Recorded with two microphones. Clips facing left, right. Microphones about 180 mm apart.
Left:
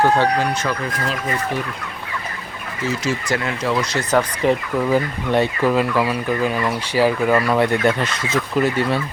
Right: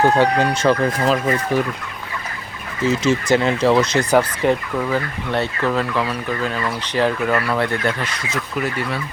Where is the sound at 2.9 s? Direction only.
25° right (ahead or behind).